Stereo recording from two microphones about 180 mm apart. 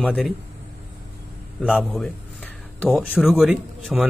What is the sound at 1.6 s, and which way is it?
Speech, centre (ahead or behind).